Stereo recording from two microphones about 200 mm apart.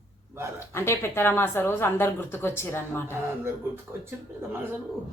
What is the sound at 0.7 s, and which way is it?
A woman's voice, 15° left (ahead or behind).